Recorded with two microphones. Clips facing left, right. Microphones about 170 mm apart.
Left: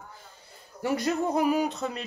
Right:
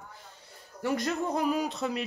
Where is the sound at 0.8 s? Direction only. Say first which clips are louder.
Left 3 dB; 5° left (ahead or behind).